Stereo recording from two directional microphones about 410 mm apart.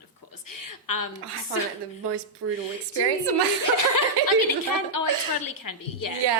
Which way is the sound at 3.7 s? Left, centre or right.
Left.